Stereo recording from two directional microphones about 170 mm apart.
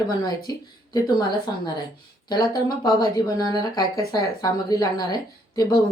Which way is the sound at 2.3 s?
25° left (ahead or behind).